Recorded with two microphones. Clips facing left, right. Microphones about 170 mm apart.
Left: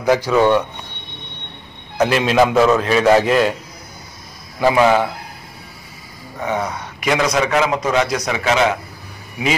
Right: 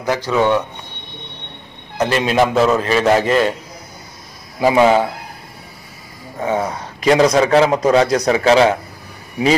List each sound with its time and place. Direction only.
0.3 s a man's voice: centre (ahead or behind)
2.0 s a man's voice: centre (ahead or behind)
4.6 s a man's voice: 20° right (ahead or behind)
6.4 s a man's voice: 30° right (ahead or behind)